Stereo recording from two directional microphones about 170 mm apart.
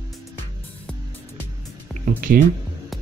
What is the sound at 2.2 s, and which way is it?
Speech, 55° right (ahead or behind).